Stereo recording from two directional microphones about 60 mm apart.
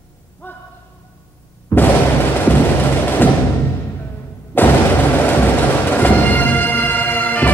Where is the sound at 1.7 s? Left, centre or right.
Left.